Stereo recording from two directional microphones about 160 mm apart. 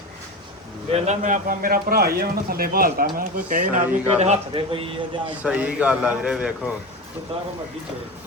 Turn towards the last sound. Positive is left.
turn(degrees=-40)  # may be behind; listen again after turning